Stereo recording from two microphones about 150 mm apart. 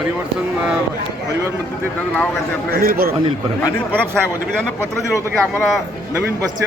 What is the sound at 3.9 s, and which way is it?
A man's voice, 5° left (ahead or behind).